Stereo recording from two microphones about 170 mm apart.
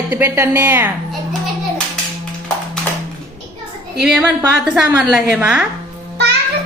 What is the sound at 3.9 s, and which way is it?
A woman's voice, 5° right (ahead or behind).